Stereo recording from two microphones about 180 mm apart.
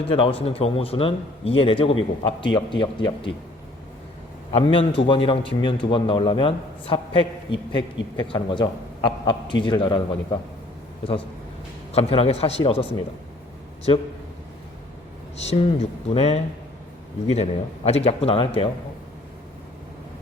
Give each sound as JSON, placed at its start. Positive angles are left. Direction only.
{"t": 0.0, "sound": "speech", "side_deg": 30}
{"t": 4.5, "sound": "speech", "side_deg": 30}
{"t": 11.9, "sound": "a man's voice", "side_deg": 35}
{"t": 15.4, "sound": "a man's voice", "side_deg": 35}